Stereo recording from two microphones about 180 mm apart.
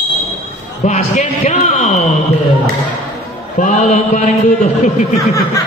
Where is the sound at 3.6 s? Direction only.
40° left (ahead or behind).